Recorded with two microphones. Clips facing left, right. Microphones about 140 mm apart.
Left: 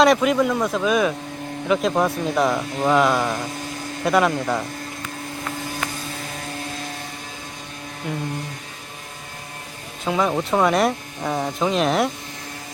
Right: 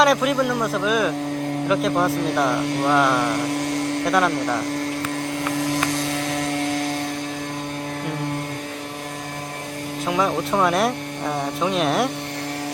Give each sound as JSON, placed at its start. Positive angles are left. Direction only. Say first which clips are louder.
{"t": 0.0, "sound": "speech", "louder": "left 2 dB", "side_deg": 0}
{"t": 3.2, "sound": "a sound", "louder": "right 5 dB", "side_deg": -75}
{"t": 4.0, "sound": "speech", "louder": "left 3 dB", "side_deg": 0}
{"t": 5.3, "sound": "vehicle", "louder": "right 7 dB", "side_deg": -80}
{"t": 10.1, "sound": "speech", "louder": "left 1 dB", "side_deg": 0}